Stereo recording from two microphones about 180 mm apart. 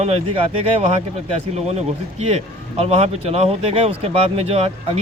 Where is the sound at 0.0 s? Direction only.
35° right (ahead or behind).